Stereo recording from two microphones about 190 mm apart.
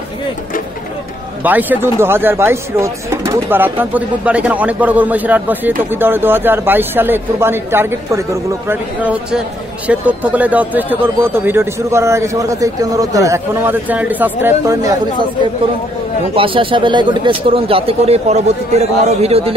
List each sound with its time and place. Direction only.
1.4 s speech: 10° right (ahead or behind)
16.3 s a man's voice: 25° right (ahead or behind)